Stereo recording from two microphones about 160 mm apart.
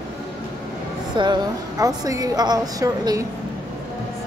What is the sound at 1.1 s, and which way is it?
A woman's voice, 30° right (ahead or behind).